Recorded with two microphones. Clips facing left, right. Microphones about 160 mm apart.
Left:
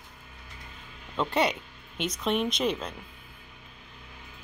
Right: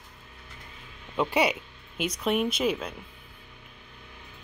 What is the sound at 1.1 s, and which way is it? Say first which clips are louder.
Speech: right 1 dB; 10° right (ahead or behind).